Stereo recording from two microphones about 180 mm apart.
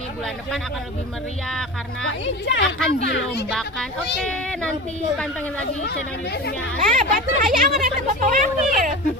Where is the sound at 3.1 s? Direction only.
70° left (ahead or behind).